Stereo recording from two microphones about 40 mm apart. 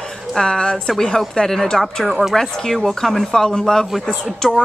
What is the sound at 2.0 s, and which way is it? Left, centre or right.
A woman's voice, centre.